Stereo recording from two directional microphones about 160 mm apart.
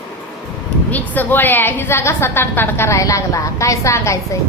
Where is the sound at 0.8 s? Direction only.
10° left (ahead or behind).